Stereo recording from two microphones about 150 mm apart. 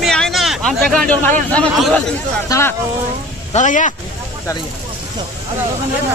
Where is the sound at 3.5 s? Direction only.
55° left (ahead or behind).